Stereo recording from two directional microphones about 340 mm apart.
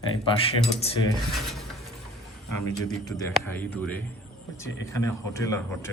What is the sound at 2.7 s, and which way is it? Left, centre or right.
A man's voice, centre.